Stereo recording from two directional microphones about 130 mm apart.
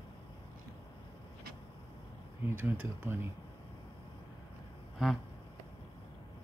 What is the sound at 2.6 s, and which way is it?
Speech, 15° right (ahead or behind).